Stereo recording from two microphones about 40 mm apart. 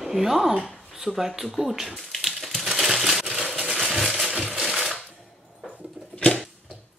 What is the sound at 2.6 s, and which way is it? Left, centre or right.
Crumpling, centre.